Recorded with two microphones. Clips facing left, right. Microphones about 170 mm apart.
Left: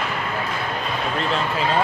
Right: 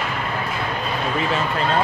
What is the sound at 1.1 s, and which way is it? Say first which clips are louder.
Speech: right 1 dB; centre (ahead or behind).